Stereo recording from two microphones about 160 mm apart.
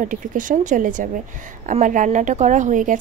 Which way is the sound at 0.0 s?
55° right (ahead or behind).